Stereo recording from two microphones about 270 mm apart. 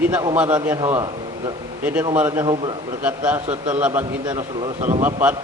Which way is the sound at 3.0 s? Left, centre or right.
Centre.